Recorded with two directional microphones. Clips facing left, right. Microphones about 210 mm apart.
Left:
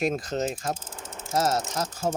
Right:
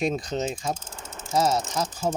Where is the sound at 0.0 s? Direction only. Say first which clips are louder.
Even; 5° left (ahead or behind).